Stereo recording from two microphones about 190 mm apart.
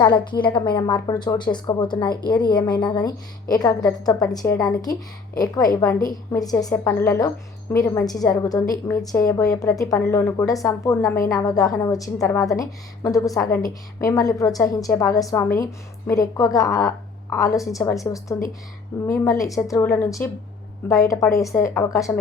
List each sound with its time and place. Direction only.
0.0 s a woman's voice: 25° left (ahead or behind)